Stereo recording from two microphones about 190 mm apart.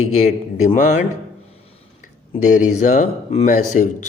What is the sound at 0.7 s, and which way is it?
Speech, 40° left (ahead or behind).